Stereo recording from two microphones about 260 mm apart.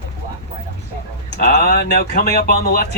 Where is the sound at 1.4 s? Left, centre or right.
Left.